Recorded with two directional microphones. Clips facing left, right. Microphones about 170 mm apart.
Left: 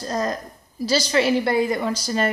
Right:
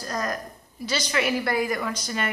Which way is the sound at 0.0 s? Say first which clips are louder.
Left 4 dB; 25° left (ahead or behind).